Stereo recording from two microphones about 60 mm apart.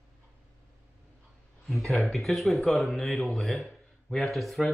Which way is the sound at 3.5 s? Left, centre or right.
Centre.